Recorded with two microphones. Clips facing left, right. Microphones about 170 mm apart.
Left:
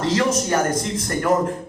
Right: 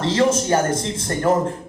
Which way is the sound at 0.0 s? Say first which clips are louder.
Right 2 dB; 30° right (ahead or behind).